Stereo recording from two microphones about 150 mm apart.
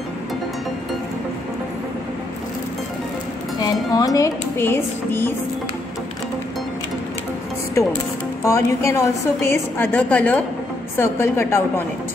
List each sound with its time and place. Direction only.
3.9 s a woman's voice: 25° left (ahead or behind)
8.5 s a woman's voice: 20° left (ahead or behind)